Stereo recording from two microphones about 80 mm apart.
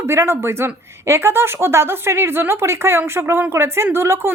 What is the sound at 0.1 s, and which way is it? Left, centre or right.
A woman's voice, right.